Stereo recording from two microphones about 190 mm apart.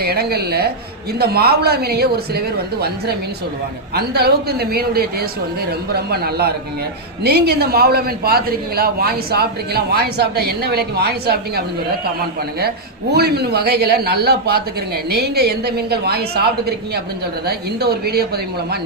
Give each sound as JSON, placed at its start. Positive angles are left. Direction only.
{"t": 0.0, "sound": "a man's voice", "side_deg": -55}
{"t": 3.9, "sound": "a man's voice", "side_deg": -55}
{"t": 13.1, "sound": "a man's voice", "side_deg": -55}